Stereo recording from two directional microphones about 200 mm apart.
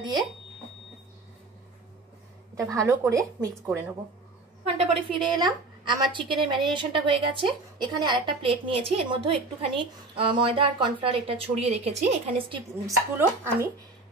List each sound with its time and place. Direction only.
2.5 s a woman's voice: 15° right (ahead or behind)
4.6 s a woman's voice: 25° right (ahead or behind)
13.2 s a woman's voice: 10° right (ahead or behind)